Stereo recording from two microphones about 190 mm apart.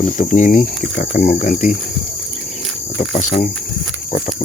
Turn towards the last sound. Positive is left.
turn(degrees=45)  # may be behind; listen again after turning